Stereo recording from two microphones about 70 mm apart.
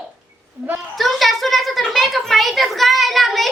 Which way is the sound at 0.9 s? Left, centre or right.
Centre.